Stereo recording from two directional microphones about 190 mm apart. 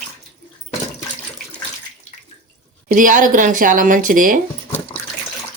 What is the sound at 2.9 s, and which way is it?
Speech, 45° right (ahead or behind).